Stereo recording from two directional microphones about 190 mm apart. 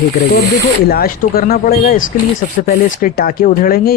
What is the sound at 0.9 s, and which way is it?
Speech, 50° left (ahead or behind).